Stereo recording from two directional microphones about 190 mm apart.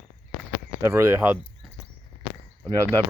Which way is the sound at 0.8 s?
10° right (ahead or behind).